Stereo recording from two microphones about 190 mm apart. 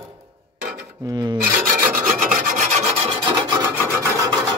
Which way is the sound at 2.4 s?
40° right (ahead or behind).